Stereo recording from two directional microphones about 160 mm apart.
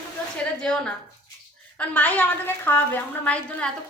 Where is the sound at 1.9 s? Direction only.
10° left (ahead or behind).